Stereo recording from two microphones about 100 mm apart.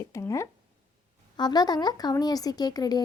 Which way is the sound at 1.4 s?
45° left (ahead or behind).